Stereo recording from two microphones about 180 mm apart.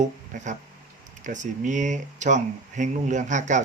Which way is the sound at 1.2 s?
45° right (ahead or behind).